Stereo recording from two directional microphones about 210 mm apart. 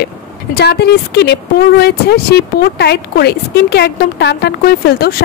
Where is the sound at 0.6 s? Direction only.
50° left (ahead or behind).